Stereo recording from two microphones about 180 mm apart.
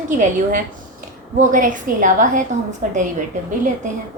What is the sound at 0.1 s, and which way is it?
A woman's voice, 45° right (ahead or behind).